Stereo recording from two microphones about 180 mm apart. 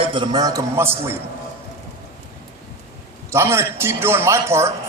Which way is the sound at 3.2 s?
15° right (ahead or behind).